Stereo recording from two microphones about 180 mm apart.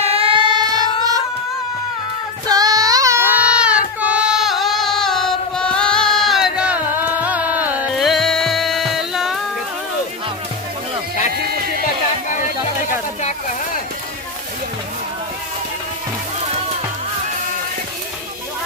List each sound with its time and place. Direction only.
0.0 s child singing: 30° right (ahead or behind)
2.5 s child singing: 20° right (ahead or behind)
3.5 s music: 5° right (ahead or behind)
16.4 s music: 35° right (ahead or behind)